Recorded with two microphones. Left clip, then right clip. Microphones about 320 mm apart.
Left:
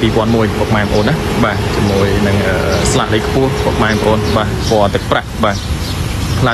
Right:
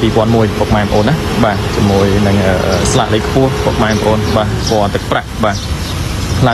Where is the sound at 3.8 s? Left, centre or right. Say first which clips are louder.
Left 1 dB; centre.